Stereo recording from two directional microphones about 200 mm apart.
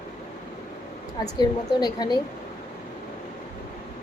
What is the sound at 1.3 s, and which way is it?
Speech, 20° left (ahead or behind).